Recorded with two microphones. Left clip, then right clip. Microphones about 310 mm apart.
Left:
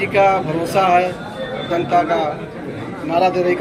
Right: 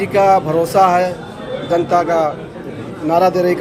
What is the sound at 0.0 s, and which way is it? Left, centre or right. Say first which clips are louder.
A man's voice: right 2 dB; centre.